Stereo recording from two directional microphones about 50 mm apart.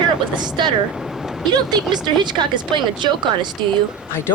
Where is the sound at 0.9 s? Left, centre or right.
Centre.